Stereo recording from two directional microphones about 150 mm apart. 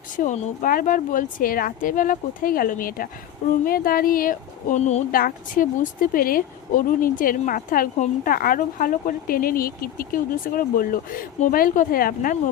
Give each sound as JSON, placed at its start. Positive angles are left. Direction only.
{"t": 0.2, "sound": "a woman's voice", "side_deg": 60}
{"t": 5.1, "sound": "a woman's voice", "side_deg": 70}